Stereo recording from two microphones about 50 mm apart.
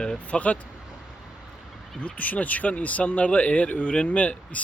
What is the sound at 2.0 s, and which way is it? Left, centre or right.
Speech, left.